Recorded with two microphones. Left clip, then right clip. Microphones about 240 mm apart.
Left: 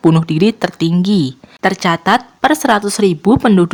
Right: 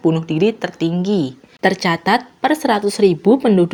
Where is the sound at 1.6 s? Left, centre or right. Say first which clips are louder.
Left 3 dB; centre.